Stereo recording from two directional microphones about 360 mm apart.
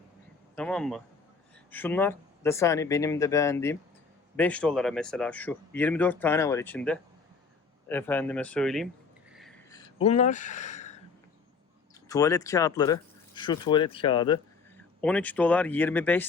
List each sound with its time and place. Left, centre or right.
0.5 s speech: centre
9.3 s a sound: centre
12.0 s speech: centre